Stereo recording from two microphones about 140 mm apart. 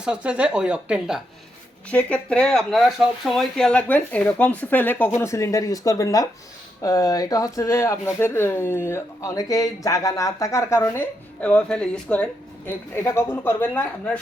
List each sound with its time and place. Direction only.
0.0 s speech: 10° right (ahead or behind)
1.9 s speech: 10° left (ahead or behind)